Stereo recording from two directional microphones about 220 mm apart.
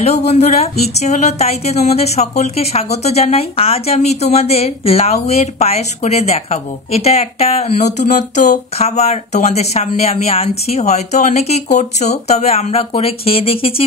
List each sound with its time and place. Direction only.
0.0 s speech: 30° left (ahead or behind)